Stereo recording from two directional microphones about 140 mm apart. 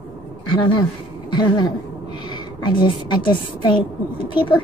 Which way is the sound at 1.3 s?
30° left (ahead or behind).